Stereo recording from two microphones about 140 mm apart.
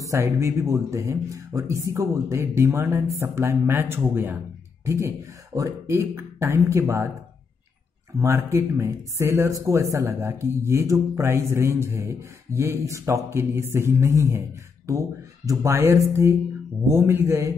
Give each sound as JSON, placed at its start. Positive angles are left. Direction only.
{"t": 0.0, "sound": "speech", "side_deg": -20}
{"t": 8.2, "sound": "speech", "side_deg": -20}